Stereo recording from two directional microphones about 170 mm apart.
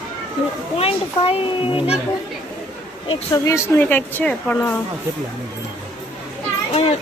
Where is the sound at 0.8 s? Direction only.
35° left (ahead or behind).